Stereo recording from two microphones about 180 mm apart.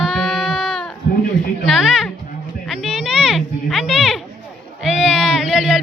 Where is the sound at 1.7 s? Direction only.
Centre (ahead or behind).